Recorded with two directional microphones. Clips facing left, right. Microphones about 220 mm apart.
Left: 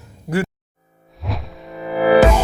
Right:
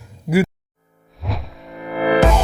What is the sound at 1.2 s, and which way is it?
Music, centre (ahead or behind).